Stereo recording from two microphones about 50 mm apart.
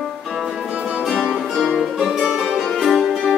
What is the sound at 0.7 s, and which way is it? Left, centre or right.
Music, right.